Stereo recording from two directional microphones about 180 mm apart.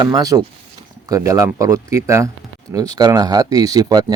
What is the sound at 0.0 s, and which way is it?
A man's voice, 20° right (ahead or behind).